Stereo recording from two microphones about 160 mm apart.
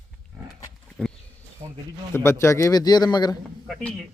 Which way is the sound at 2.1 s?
15° left (ahead or behind).